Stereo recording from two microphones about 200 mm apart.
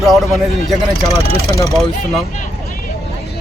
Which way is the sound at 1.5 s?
15° left (ahead or behind).